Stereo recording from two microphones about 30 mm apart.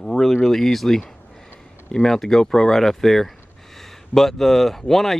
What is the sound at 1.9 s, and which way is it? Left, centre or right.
Speech, left.